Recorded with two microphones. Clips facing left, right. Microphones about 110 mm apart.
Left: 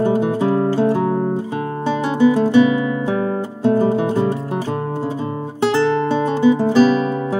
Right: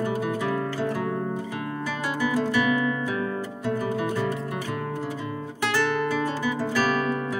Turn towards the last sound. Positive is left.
turn(degrees=25)  # may be behind; listen again after turning